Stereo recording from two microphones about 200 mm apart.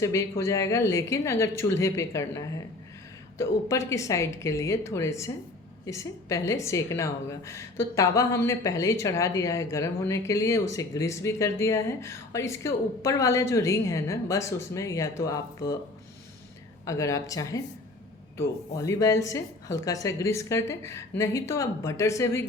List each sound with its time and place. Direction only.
0.0 s a woman's voice: 15° left (ahead or behind)
16.8 s a woman's voice: 15° left (ahead or behind)